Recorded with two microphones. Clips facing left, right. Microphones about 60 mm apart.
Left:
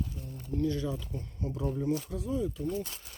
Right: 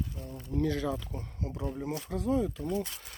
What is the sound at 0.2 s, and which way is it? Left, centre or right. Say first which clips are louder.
Speech: right 1 dB; right.